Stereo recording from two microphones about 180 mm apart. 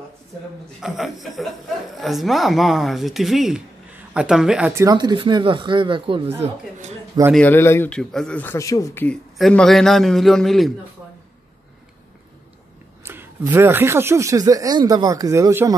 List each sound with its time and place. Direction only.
0.7 s speech: centre (ahead or behind)
4.8 s speech: 25° right (ahead or behind)
7.3 s speech: 10° left (ahead or behind)
13.0 s speech: 15° right (ahead or behind)